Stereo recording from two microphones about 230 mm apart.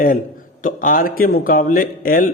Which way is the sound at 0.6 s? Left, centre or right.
Left.